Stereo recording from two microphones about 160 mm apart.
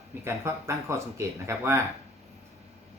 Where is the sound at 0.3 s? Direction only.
15° right (ahead or behind).